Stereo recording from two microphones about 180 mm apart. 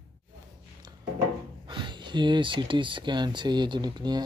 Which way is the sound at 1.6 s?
25° right (ahead or behind).